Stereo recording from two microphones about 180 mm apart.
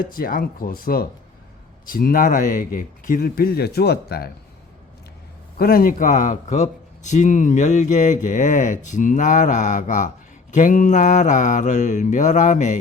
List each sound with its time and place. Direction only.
0.2 s speech: 50° left (ahead or behind)
5.5 s speech: 50° left (ahead or behind)